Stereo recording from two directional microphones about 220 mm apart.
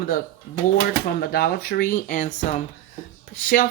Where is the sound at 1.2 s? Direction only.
45° left (ahead or behind).